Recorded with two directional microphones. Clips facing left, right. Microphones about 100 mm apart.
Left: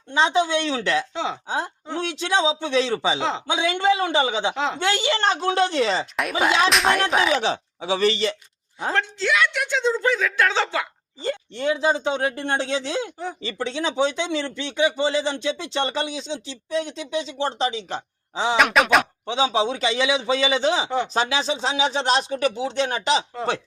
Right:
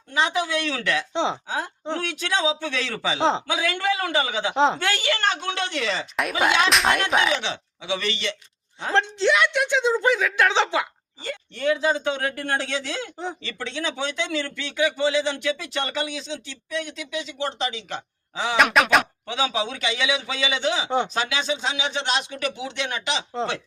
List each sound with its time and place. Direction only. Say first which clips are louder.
0.1 s speech: left 4 dB; 30° left (ahead or behind)
1.1 s a woman's voice: right 3 dB; 25° right (ahead or behind)
1.5 s speech: left 1 dB; 25° left (ahead or behind)
3.2 s a man's voice: right 4 dB; 30° right (ahead or behind)
3.4 s speech: left 4 dB; 25° left (ahead or behind)
4.5 s a man's voice: right 6 dB; 30° right (ahead or behind)
4.8 s speech: left 2 dB; 25° left (ahead or behind)
6.7 s a sound: left 1 dB; centre (ahead or behind)
7.4 s speech: left 6 dB; 35° left (ahead or behind)
8.9 s a woman's voice: right 3 dB; 25° right (ahead or behind)
11.2 s speech: left 3 dB; 30° left (ahead or behind)
18.5 s a sound: even; centre (ahead or behind)
19.2 s speech: left 4 dB; 25° left (ahead or behind)